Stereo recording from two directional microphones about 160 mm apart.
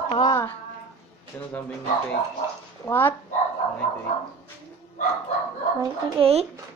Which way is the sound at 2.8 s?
15° left (ahead or behind).